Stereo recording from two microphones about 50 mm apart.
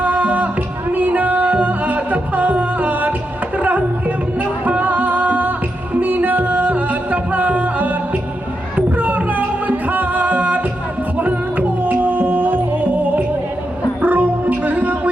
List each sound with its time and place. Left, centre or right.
0.0 s music: right